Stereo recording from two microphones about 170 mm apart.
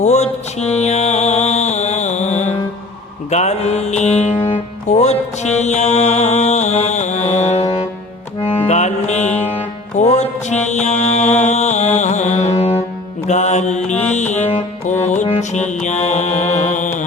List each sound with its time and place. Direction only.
0.0 s music: 40° left (ahead or behind)
13.2 s mantra: 45° left (ahead or behind)
15.0 s music: 40° left (ahead or behind)